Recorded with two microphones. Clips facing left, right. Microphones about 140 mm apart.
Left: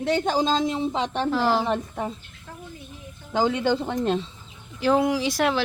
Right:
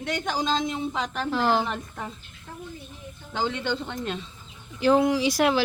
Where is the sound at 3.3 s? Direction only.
45° left (ahead or behind).